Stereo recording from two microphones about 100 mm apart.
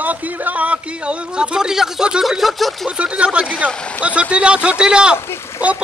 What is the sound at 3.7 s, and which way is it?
Speech, 10° left (ahead or behind).